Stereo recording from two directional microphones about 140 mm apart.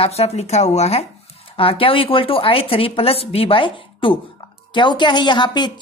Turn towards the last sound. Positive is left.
turn(degrees=35)  # may be behind; listen again after turning